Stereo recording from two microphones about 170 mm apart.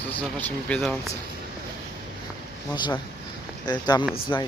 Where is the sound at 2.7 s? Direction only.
25° left (ahead or behind).